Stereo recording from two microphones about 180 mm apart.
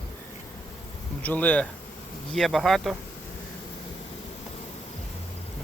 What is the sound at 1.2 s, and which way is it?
Speech, 10° left (ahead or behind).